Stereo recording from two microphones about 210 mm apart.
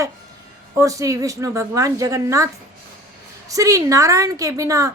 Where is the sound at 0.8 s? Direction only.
15° right (ahead or behind).